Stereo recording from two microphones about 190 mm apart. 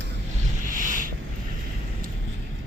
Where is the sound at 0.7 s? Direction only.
45° right (ahead or behind).